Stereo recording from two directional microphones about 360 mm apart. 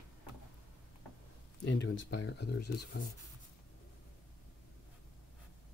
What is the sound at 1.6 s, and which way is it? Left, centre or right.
Speech, left.